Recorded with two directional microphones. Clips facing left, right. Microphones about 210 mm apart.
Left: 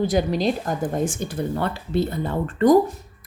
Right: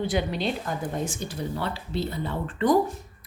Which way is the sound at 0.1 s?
40° left (ahead or behind).